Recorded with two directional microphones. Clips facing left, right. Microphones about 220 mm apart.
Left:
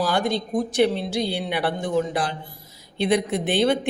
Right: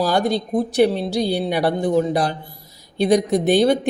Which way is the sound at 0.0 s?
40° right (ahead or behind).